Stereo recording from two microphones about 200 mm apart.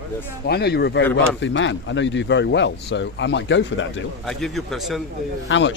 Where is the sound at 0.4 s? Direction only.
55° left (ahead or behind).